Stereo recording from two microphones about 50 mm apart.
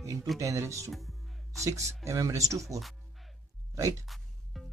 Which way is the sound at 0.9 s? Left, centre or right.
Centre.